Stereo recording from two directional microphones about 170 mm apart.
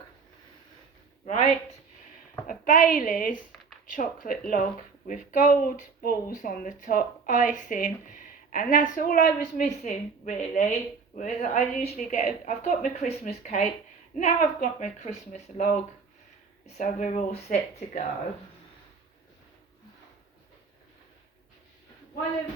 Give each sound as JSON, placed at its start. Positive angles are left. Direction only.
{"t": 1.3, "sound": "a woman's voice", "side_deg": 35}
{"t": 2.5, "sound": "a woman's voice", "side_deg": 50}